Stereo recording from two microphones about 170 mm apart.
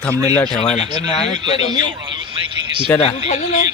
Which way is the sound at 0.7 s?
40° left (ahead or behind).